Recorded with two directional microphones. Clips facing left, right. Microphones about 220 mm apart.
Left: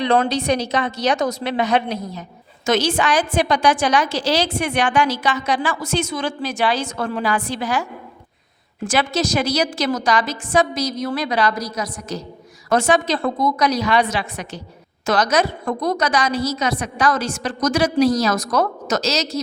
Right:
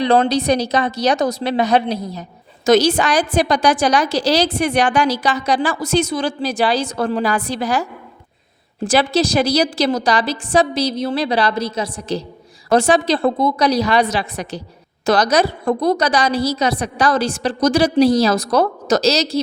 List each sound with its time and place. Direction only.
0.0 s a woman's voice: 35° right (ahead or behind)